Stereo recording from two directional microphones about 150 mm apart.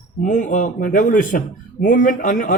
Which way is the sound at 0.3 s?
55° left (ahead or behind).